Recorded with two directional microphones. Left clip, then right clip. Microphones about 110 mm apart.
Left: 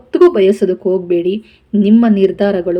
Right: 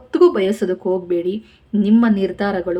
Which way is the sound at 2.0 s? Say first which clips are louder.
Left 7 dB; 15° left (ahead or behind).